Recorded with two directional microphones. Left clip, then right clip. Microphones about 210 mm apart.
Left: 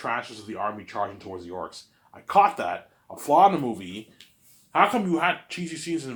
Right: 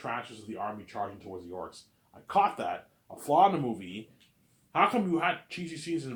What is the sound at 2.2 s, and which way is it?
Speech, 25° left (ahead or behind).